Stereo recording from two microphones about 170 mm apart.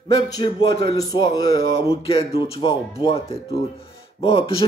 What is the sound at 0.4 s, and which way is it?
Speech, 25° left (ahead or behind).